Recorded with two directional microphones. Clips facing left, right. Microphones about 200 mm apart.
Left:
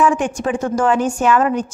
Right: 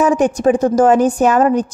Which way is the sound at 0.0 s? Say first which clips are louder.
Right 5 dB; 40° right (ahead or behind).